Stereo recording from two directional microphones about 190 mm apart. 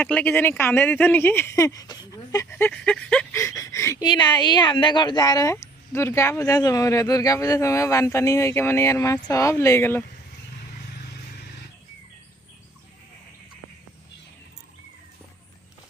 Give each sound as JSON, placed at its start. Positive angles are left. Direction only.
{"t": 0.0, "sound": "speech", "side_deg": 10}